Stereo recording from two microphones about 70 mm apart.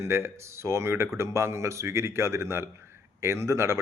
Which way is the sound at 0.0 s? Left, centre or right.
Right.